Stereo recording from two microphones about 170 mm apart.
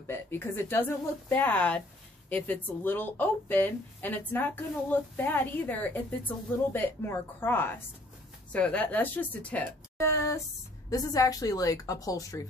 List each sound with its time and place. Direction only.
0.0 s a woman's voice: 15° left (ahead or behind)